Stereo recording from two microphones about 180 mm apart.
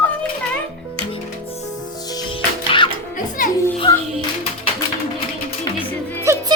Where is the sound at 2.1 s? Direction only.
25° left (ahead or behind).